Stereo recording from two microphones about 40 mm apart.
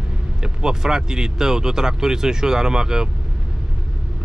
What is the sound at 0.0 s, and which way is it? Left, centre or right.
Speech, centre.